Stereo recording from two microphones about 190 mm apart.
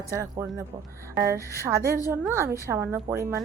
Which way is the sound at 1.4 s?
15° left (ahead or behind).